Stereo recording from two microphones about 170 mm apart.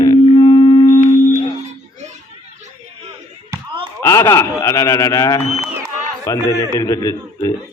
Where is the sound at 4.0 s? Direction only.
15° left (ahead or behind).